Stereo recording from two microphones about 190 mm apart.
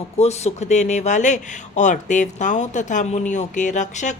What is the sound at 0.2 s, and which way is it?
Speech, 35° left (ahead or behind).